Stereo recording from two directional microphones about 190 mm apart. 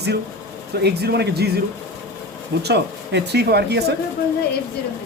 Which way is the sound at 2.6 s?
60° right (ahead or behind).